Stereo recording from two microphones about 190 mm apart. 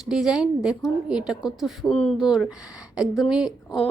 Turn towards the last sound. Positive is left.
turn(degrees=0)  # may be behind; listen again after turning